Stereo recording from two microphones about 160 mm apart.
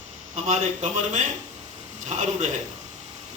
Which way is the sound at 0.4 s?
45° right (ahead or behind).